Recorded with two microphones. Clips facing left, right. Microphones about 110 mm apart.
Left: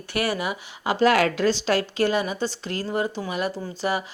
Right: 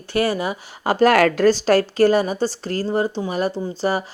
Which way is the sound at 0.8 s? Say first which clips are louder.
Right 4 dB; 45° right (ahead or behind).